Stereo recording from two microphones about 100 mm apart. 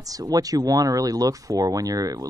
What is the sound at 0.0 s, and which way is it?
Speech, 35° right (ahead or behind).